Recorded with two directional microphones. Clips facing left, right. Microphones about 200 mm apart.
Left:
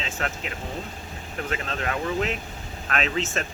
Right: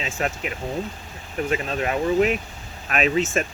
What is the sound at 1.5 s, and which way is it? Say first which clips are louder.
Speech: right 5 dB; 20° right (ahead or behind).